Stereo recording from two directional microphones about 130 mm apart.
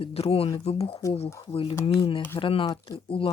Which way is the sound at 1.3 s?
25° left (ahead or behind).